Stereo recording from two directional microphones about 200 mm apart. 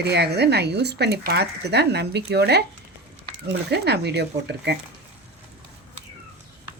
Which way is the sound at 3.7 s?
55° right (ahead or behind).